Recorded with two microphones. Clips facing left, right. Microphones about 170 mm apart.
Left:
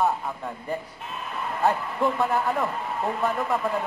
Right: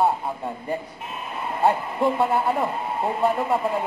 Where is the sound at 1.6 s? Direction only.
30° right (ahead or behind).